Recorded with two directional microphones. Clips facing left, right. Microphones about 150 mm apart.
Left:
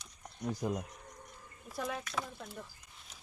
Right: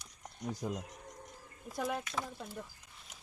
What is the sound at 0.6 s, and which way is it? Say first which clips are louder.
Speech: left 3 dB; 75° left (ahead or behind).